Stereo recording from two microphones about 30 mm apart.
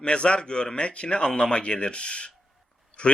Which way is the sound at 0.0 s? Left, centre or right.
Left.